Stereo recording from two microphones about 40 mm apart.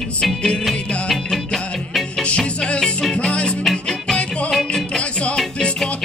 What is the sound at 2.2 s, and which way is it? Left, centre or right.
Music, left.